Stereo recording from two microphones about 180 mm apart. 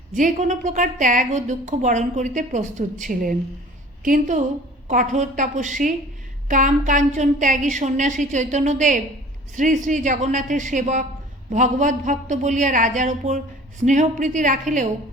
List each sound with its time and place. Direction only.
0.1 s a woman's voice: 45° right (ahead or behind)